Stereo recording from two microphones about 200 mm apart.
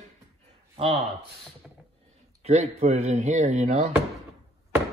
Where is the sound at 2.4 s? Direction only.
35° right (ahead or behind).